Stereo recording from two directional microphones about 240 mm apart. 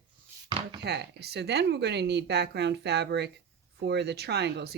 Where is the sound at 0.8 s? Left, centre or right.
Right.